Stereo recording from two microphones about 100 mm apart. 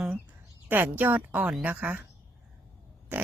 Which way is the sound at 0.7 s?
20° right (ahead or behind).